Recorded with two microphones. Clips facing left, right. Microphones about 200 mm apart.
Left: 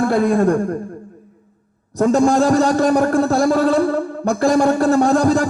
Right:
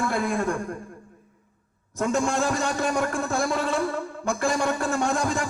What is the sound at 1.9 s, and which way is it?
A man's voice, 35° left (ahead or behind).